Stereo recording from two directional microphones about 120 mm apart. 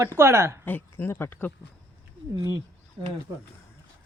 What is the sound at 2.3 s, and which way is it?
Speech, 35° right (ahead or behind).